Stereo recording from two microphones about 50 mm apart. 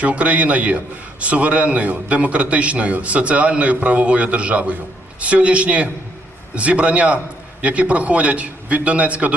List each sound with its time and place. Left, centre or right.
0.0 s a man's voice: right